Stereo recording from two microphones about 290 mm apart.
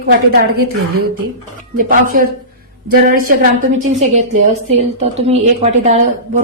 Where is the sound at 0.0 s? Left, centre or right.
Right.